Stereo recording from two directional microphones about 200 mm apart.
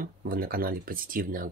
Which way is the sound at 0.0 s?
45° right (ahead or behind).